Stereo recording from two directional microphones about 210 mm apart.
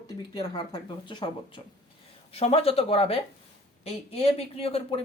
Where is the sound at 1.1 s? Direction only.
20° left (ahead or behind).